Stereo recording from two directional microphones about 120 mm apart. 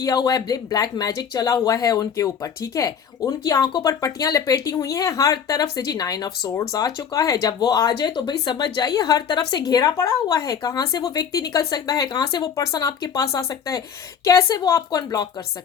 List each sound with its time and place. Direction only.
0.0 s speech: 30° left (ahead or behind)